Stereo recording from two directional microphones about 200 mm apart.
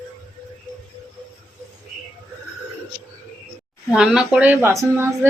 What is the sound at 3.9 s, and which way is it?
A woman's voice, 5° right (ahead or behind).